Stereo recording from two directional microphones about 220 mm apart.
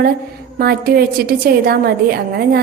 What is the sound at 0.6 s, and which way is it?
A woman's voice, 45° right (ahead or behind).